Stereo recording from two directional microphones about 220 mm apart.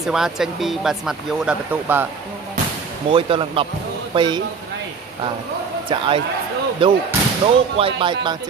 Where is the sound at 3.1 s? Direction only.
25° right (ahead or behind).